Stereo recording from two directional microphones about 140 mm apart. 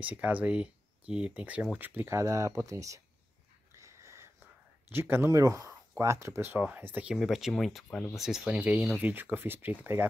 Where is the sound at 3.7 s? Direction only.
20° right (ahead or behind).